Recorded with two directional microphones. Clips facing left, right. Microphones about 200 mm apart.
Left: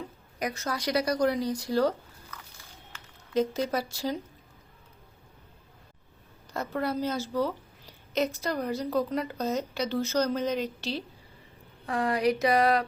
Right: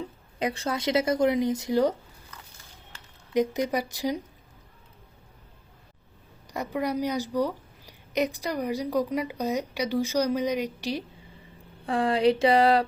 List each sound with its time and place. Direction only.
0.3 s speech: 30° right (ahead or behind)
3.3 s a woman's voice: 20° right (ahead or behind)
6.5 s a woman's voice: 15° right (ahead or behind)
11.9 s speech: 30° right (ahead or behind)